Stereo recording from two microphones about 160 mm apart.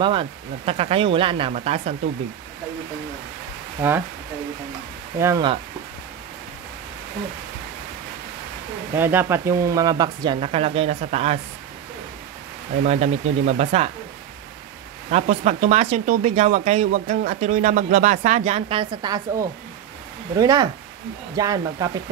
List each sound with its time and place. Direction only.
0.0 s speech: 35° right (ahead or behind)
5.2 s speech: 20° right (ahead or behind)
8.9 s speech: 15° right (ahead or behind); by 11.3 s 40° right (ahead or behind)
12.8 s speech: 45° right (ahead or behind)
15.0 s speech: 45° right (ahead or behind); by 19.2 s 25° right (ahead or behind)
20.3 s speech: 20° right (ahead or behind)